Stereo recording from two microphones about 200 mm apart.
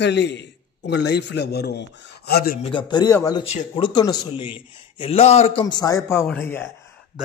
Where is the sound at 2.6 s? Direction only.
25° left (ahead or behind).